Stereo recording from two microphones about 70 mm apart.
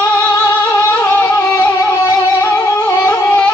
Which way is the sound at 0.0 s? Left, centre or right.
Left.